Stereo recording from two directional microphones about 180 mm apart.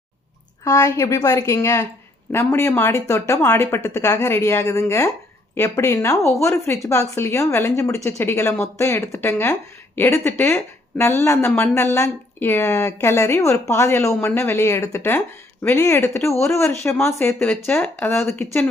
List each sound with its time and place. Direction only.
0.6 s speech: 15° left (ahead or behind)